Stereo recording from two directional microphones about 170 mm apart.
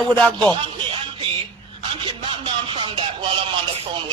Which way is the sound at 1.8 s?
35° right (ahead or behind).